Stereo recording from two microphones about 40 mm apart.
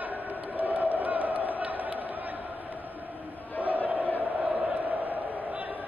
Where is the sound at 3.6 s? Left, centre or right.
Right.